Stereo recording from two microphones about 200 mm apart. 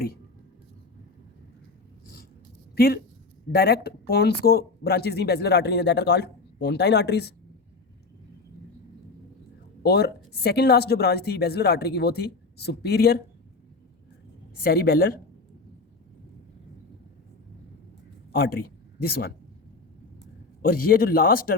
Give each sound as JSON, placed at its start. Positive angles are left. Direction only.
{"t": 2.7, "sound": "speech", "side_deg": 50}
{"t": 9.8, "sound": "a woman's voice", "side_deg": 55}
{"t": 14.6, "sound": "a woman's voice", "side_deg": 50}
{"t": 18.3, "sound": "a sound", "side_deg": 50}
{"t": 19.0, "sound": "a woman's voice", "side_deg": 50}
{"t": 20.6, "sound": "a woman's voice", "side_deg": 50}